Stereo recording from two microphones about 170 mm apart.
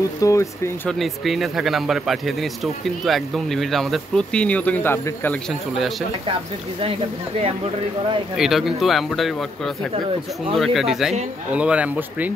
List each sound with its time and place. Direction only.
0.2 s speech: 20° left (ahead or behind)
0.8 s speech: centre (ahead or behind)
5.5 s speech: centre (ahead or behind)
6.8 s speech: 35° right (ahead or behind)
8.4 s speech: centre (ahead or behind)
10.5 s speech: centre (ahead or behind)